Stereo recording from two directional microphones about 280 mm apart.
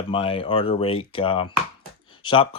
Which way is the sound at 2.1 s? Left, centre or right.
Centre.